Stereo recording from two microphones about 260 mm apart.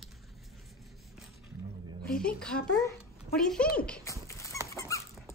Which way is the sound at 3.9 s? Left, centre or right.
Centre.